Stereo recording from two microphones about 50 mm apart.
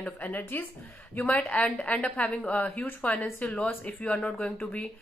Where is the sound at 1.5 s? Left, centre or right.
Left.